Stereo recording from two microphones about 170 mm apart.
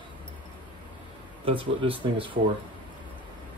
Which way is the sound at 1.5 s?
30° right (ahead or behind).